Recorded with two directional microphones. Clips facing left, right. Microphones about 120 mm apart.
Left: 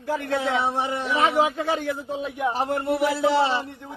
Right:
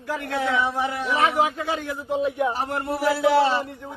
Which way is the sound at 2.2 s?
25° right (ahead or behind).